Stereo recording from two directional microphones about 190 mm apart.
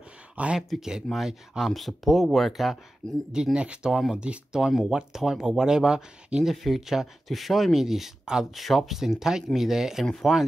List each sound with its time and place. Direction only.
0.4 s speech: 5° right (ahead or behind)